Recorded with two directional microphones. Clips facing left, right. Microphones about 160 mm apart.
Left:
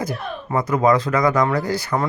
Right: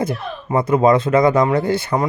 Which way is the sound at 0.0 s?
25° right (ahead or behind).